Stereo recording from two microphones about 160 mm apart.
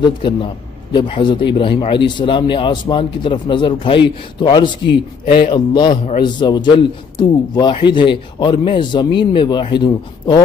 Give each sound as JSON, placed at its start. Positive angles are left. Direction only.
{"t": 0.0, "sound": "speech", "side_deg": 30}
{"t": 5.2, "sound": "speech", "side_deg": 75}
{"t": 5.5, "sound": "speech", "side_deg": 30}